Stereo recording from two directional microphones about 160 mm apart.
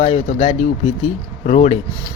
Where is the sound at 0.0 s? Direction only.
40° left (ahead or behind).